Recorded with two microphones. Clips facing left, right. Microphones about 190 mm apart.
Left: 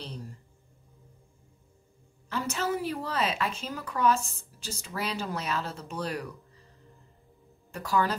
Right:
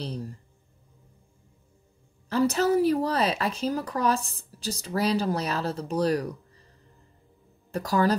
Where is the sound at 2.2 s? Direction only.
35° right (ahead or behind).